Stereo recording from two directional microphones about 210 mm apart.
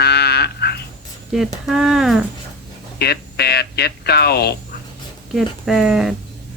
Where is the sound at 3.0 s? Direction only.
50° left (ahead or behind).